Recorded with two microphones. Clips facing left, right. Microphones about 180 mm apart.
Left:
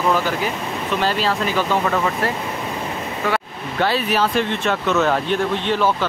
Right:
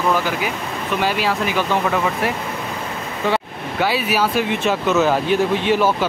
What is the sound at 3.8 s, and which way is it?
Speech, 10° right (ahead or behind).